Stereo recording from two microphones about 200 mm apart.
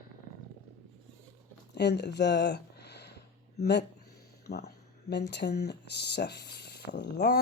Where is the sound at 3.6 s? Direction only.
55° left (ahead or behind).